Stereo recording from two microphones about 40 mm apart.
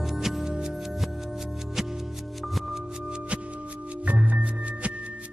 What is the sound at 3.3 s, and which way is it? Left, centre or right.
Music, right.